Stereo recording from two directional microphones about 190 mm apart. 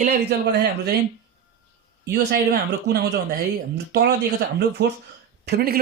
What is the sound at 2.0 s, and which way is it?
Speech, 55° right (ahead or behind).